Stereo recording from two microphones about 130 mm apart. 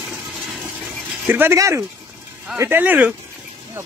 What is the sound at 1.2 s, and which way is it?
Speech, 15° right (ahead or behind).